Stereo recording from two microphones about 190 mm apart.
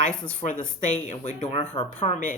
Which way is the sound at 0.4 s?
40° left (ahead or behind).